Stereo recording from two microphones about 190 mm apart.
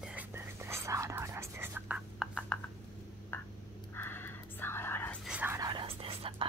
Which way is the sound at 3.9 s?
10° left (ahead or behind).